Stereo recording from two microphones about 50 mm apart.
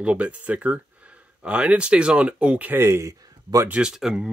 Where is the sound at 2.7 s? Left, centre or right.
Right.